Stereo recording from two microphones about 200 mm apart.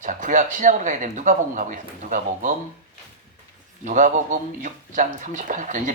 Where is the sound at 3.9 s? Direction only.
40° right (ahead or behind).